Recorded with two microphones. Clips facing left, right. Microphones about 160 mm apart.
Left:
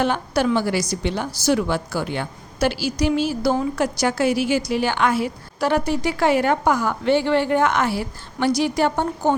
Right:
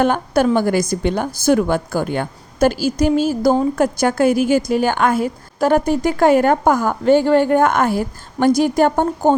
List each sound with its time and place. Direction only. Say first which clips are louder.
0.0 s a woman's voice: right 5 dB; 50° right (ahead or behind)